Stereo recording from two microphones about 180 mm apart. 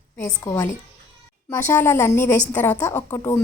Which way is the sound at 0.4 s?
15° left (ahead or behind).